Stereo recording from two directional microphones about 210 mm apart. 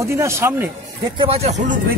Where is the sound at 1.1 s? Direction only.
25° right (ahead or behind).